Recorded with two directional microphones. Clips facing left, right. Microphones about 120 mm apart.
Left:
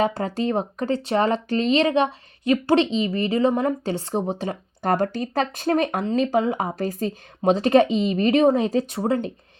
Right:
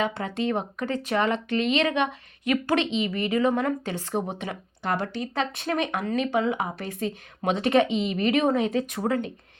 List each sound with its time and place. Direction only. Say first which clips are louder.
0.0 s speech: left 4 dB; 35° left (ahead or behind)
4.8 s speech: left 6 dB; 45° left (ahead or behind)